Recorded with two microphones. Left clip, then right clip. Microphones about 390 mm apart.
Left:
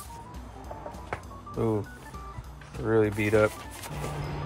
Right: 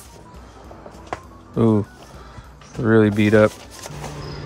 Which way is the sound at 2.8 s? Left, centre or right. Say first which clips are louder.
Right 8 dB; right.